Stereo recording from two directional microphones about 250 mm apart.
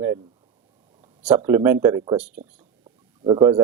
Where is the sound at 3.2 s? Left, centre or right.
Centre.